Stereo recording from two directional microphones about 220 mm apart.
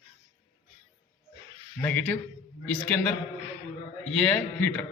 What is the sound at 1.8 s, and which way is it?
A man's voice, 10° left (ahead or behind).